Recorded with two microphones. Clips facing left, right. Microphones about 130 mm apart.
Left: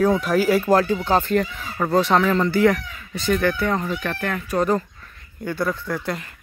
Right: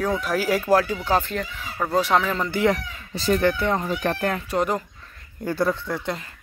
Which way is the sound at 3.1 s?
35° right (ahead or behind).